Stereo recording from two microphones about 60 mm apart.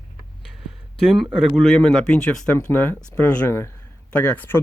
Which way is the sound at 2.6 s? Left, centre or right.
Left.